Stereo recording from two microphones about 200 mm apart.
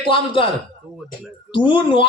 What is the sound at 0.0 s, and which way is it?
Speech, 25° left (ahead or behind).